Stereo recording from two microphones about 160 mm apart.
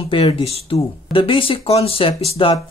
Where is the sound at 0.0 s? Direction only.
35° left (ahead or behind).